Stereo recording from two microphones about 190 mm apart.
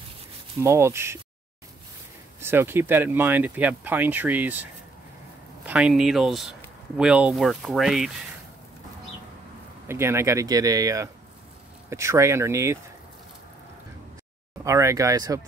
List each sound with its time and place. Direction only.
0.6 s speech: 15° right (ahead or behind)
2.4 s speech: 10° right (ahead or behind)
5.7 s speech: 5° right (ahead or behind)
9.8 s speech: 15° right (ahead or behind)
14.6 s speech: 15° right (ahead or behind)